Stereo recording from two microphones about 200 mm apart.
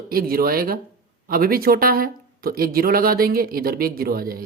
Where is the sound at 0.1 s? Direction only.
50° right (ahead or behind).